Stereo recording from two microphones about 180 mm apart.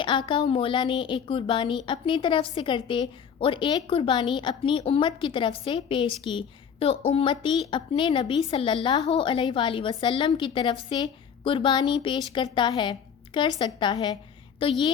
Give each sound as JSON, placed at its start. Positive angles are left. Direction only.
{"t": 0.0, "sound": "a woman's voice", "side_deg": 25}